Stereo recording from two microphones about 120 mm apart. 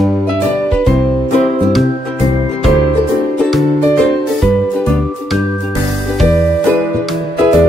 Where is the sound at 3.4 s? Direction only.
Centre (ahead or behind).